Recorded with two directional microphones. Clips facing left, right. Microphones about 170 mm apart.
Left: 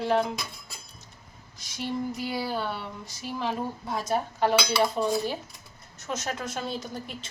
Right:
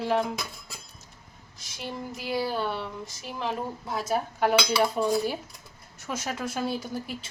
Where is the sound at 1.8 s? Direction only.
Centre (ahead or behind).